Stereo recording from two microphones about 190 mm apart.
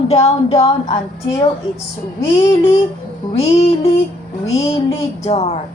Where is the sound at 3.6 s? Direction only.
30° left (ahead or behind).